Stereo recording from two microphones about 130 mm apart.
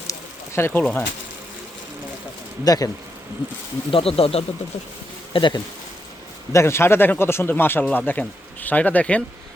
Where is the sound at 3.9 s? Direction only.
45° left (ahead or behind).